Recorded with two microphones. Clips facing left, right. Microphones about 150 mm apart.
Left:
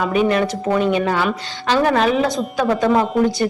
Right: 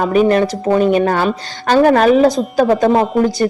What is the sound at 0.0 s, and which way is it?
A woman's voice, 40° right (ahead or behind).